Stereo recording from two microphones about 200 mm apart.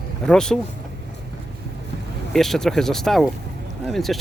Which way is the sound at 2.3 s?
Centre (ahead or behind).